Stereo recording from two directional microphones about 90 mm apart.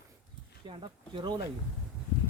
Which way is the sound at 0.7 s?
65° right (ahead or behind).